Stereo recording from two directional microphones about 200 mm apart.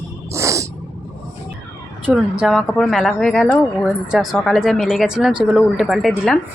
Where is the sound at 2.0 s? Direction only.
5° right (ahead or behind).